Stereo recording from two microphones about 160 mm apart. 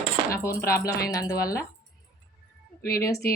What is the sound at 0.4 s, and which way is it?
Speech, 20° left (ahead or behind).